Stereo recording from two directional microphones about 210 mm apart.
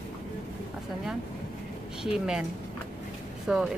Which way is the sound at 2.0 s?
5° right (ahead or behind).